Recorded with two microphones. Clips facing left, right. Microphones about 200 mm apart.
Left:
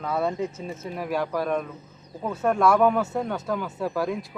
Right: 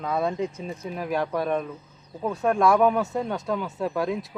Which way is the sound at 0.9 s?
Centre (ahead or behind).